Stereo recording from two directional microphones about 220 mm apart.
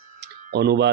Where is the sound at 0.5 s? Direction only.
50° right (ahead or behind).